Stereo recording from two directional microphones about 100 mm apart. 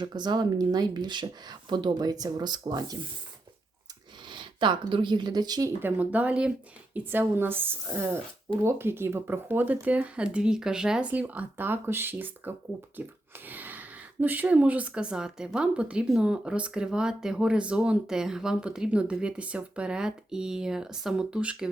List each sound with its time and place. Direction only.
0.0 s speech: 45° right (ahead or behind)
4.3 s speech: 50° right (ahead or behind)
5.8 s speech: 15° right (ahead or behind)